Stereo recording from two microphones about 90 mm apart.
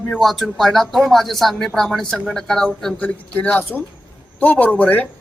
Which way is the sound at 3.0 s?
20° left (ahead or behind).